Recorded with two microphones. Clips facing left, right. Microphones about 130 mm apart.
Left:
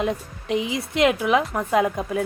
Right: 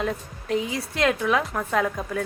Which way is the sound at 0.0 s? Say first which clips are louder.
Left 3 dB; 15° left (ahead or behind).